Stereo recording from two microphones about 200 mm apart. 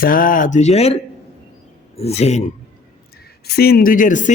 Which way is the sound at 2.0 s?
30° left (ahead or behind).